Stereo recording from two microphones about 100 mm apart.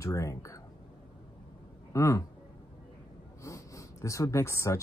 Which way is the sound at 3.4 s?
30° left (ahead or behind).